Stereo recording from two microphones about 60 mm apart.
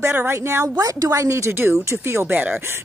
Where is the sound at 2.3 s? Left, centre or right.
Right.